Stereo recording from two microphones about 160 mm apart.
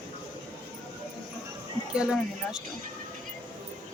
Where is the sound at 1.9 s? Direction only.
5° right (ahead or behind).